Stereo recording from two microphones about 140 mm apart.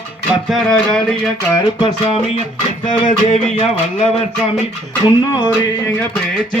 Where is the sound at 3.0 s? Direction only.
50° left (ahead or behind).